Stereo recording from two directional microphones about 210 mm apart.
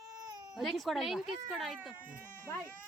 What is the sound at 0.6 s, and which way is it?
Speech, centre (ahead or behind).